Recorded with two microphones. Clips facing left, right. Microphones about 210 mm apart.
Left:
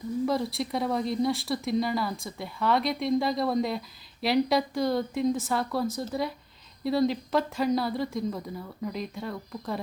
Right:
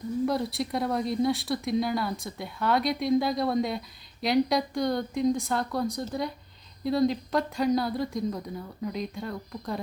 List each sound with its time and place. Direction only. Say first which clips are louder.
0.3 s speech: even; centre (ahead or behind)